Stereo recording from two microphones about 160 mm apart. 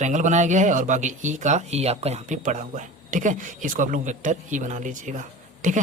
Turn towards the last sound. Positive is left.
turn(degrees=-50)  # may be behind; listen again after turning